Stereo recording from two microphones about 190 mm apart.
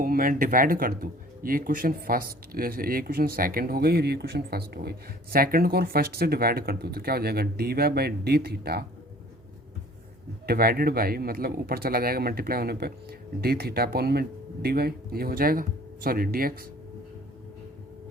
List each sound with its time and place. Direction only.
0.0 s speech: 45° right (ahead or behind)
10.4 s speech: 50° right (ahead or behind)